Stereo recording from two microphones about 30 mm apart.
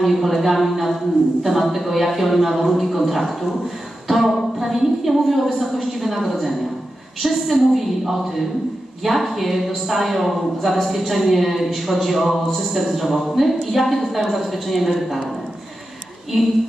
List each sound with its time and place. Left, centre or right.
0.0 s a woman's voice: centre
4.1 s a sound: centre
4.6 s a woman's voice: centre
16.3 s a woman's voice: centre